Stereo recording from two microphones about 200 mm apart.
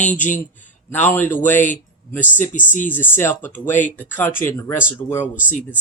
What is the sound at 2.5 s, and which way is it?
Speech, 40° left (ahead or behind).